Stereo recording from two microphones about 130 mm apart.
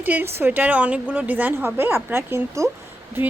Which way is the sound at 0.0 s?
15° right (ahead or behind).